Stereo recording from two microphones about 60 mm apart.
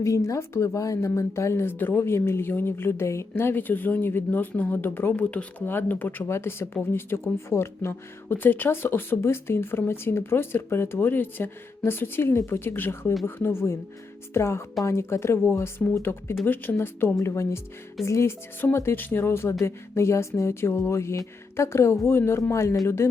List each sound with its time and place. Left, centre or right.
0.0 s speech: left
6.2 s speech: left
16.5 s speech: left